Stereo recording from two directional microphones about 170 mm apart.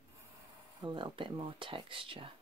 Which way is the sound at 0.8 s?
30° right (ahead or behind).